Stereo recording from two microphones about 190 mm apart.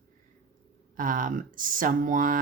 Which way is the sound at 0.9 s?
45° right (ahead or behind).